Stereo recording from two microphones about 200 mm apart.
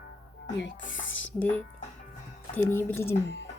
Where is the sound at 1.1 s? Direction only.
70° left (ahead or behind).